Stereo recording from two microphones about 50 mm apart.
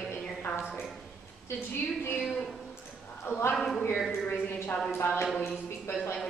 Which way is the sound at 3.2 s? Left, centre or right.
Left.